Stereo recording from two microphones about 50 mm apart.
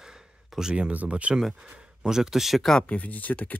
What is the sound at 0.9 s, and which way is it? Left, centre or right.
Speech, right.